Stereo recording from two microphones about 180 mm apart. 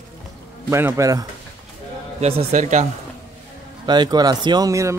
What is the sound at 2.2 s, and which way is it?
Speech, 35° right (ahead or behind).